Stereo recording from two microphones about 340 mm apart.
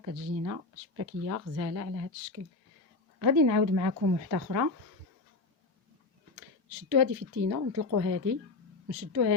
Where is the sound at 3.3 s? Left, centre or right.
Right.